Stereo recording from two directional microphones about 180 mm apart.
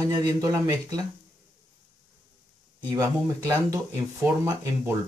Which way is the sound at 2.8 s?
20° right (ahead or behind).